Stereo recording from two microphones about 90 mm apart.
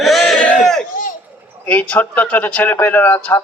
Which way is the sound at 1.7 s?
15° left (ahead or behind).